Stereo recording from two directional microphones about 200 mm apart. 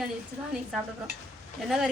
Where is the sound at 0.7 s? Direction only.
Centre (ahead or behind).